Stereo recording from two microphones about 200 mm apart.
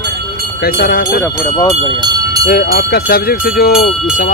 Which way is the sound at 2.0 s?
20° right (ahead or behind).